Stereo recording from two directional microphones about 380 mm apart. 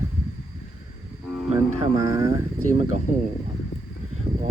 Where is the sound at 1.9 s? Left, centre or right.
Centre.